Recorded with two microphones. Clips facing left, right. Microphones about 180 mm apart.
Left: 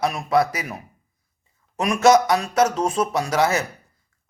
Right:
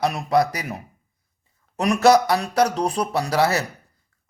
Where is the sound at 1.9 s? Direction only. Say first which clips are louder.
Even; 35° right (ahead or behind).